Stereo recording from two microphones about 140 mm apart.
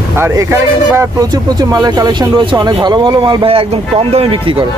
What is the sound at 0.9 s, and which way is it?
Speech, 20° right (ahead or behind).